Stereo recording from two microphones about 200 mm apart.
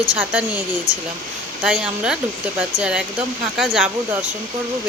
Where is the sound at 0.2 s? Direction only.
10° right (ahead or behind).